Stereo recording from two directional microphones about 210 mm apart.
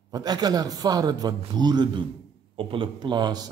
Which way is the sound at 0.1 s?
20° right (ahead or behind).